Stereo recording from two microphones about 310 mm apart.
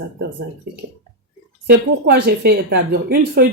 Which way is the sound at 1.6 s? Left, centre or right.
Right.